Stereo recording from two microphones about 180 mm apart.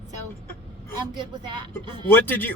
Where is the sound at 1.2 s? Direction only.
25° right (ahead or behind).